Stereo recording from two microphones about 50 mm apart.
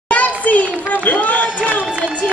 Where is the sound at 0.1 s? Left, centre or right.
Left.